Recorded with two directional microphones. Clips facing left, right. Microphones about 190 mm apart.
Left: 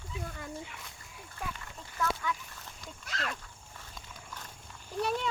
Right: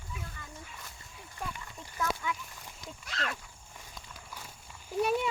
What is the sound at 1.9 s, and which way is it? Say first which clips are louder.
Speech: left 1 dB; 10° right (ahead or behind).